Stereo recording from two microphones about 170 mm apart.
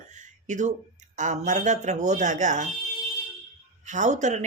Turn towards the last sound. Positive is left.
turn(degrees=-45)  # may be behind; listen again after turning